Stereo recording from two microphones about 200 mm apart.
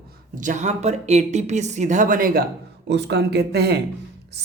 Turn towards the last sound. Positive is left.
turn(degrees=-55)  # may be behind; listen again after turning